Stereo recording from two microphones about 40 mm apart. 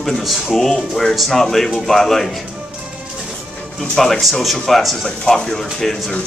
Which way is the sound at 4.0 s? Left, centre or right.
Centre.